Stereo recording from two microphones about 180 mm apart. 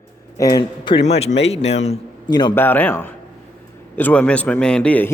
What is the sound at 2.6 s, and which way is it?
A man's voice, 10° left (ahead or behind).